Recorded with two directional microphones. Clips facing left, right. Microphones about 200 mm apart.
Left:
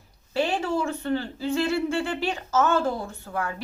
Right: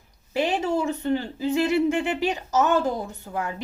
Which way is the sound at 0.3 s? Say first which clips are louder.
Right 1 dB; 20° right (ahead or behind).